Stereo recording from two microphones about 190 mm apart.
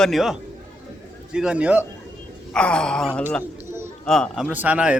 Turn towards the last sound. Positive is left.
turn(degrees=-5)  # may be behind; listen again after turning